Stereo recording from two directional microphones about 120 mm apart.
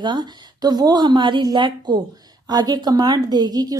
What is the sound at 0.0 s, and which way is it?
A woman's voice, 40° right (ahead or behind).